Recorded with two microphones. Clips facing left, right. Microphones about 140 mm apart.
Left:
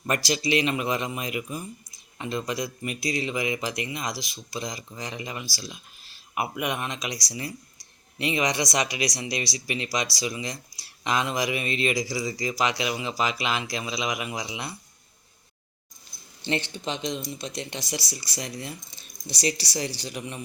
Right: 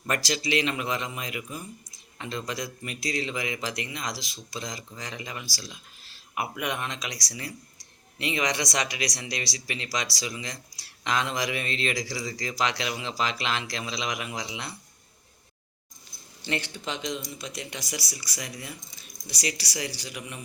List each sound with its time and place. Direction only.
0.0 s speech: 15° left (ahead or behind)
16.4 s speech: 25° left (ahead or behind)